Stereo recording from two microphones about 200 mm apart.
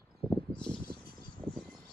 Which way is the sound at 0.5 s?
5° left (ahead or behind).